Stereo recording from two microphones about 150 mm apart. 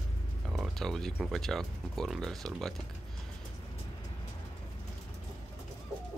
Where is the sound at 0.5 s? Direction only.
Centre (ahead or behind).